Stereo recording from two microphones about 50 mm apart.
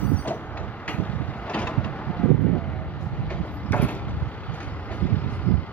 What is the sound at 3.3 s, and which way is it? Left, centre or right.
Vehicle, left.